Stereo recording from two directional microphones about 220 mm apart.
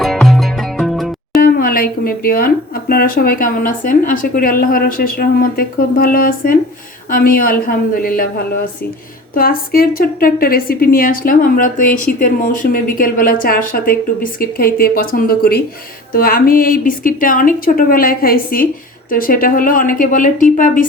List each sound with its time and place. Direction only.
0.0 s music: centre (ahead or behind)
1.4 s a woman's voice: 40° left (ahead or behind)